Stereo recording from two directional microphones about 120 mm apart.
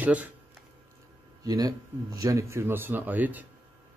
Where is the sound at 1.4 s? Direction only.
30° right (ahead or behind); by 3.5 s 15° right (ahead or behind).